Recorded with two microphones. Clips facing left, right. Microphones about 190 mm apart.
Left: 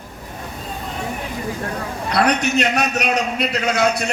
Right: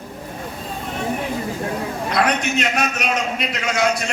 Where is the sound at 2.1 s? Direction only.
40° left (ahead or behind).